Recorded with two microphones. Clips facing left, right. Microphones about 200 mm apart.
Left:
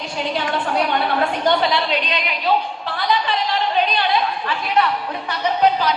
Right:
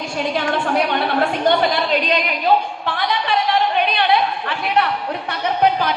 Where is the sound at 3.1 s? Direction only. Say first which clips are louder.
Right 1 dB; 60° right (ahead or behind).